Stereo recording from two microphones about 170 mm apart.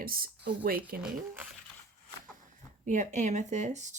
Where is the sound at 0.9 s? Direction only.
5° right (ahead or behind).